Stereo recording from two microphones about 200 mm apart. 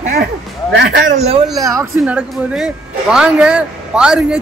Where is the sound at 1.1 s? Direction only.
30° right (ahead or behind).